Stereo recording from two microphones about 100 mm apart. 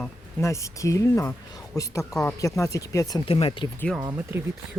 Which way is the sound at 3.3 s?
65° left (ahead or behind).